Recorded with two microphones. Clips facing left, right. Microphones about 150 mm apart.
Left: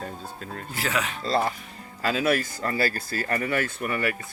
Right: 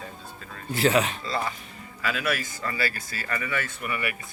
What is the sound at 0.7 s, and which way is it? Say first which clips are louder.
Speech: right 7 dB; 25° right (ahead or behind).